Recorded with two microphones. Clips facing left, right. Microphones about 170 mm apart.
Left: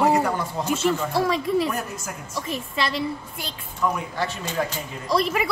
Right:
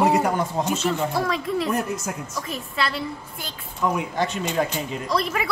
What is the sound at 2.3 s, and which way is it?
Speech, centre (ahead or behind).